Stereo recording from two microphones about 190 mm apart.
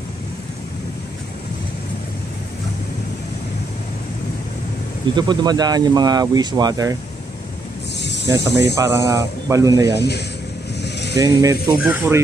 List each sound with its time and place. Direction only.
5.1 s speech: 20° right (ahead or behind)
8.7 s speech: 20° right (ahead or behind)
9.9 s speech: 60° left (ahead or behind)
10.8 s vehicle: 60° left (ahead or behind)
11.1 s speech: 20° right (ahead or behind)